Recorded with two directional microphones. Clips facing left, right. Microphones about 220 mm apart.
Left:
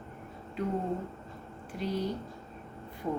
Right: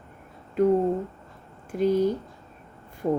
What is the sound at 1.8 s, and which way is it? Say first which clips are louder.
Speech: right 11 dB; 50° right (ahead or behind).